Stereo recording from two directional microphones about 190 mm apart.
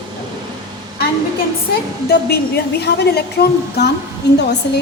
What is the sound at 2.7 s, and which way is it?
A woman's voice, 60° left (ahead or behind).